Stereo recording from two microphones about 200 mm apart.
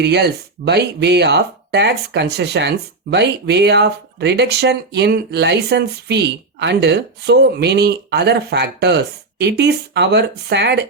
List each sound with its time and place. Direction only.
0.0 s speech: 55° right (ahead or behind)